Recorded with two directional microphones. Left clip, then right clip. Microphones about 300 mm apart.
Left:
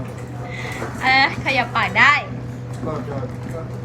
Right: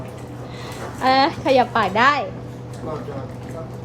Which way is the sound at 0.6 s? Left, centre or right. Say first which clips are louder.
Even; centre.